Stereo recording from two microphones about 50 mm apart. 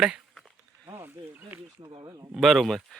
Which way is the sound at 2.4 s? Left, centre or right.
Centre.